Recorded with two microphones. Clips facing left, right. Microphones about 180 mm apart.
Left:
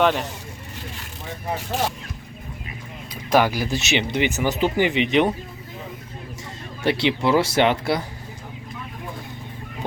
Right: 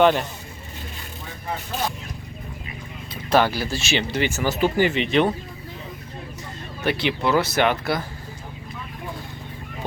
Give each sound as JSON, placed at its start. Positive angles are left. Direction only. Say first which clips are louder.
{"t": 0.0, "sound": "speech", "louder": "right 2 dB", "side_deg": 0}
{"t": 3.2, "sound": "speech", "louder": "left 1 dB", "side_deg": 10}
{"t": 6.8, "sound": "speech", "louder": "left 2 dB", "side_deg": 25}